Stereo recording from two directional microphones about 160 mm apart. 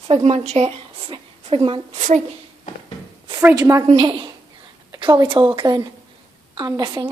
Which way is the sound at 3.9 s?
35° right (ahead or behind).